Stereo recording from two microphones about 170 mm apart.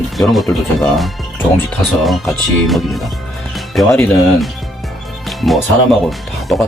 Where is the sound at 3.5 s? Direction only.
Centre (ahead or behind).